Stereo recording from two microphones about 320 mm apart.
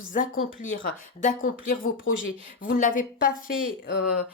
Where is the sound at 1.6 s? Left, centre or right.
Left.